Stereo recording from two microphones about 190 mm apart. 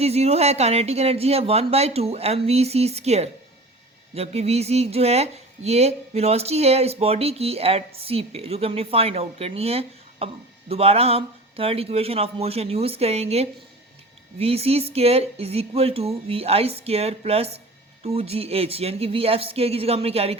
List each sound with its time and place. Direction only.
0.0 s speech: 35° right (ahead or behind)